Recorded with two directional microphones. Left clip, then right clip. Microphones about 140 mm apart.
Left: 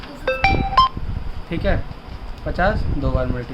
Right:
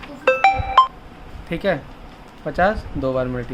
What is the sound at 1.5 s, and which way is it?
Speech, 60° right (ahead or behind).